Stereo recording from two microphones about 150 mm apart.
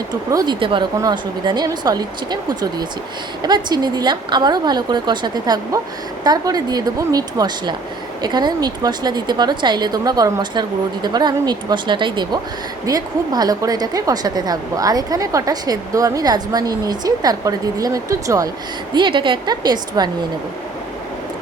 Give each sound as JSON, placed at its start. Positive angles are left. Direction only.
{"t": 0.1, "sound": "a woman's voice", "side_deg": -25}
{"t": 18.9, "sound": "a woman's voice", "side_deg": -35}